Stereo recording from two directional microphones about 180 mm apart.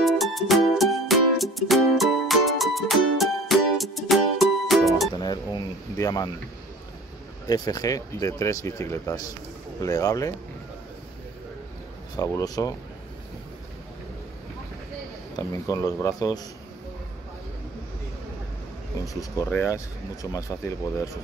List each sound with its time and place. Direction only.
0.0 s music: centre (ahead or behind)
5.1 s chink: 25° left (ahead or behind)
7.4 s speech: 20° left (ahead or behind)
12.2 s speech: 20° left (ahead or behind)
15.3 s speech: 20° left (ahead or behind)
19.1 s speech: 20° left (ahead or behind)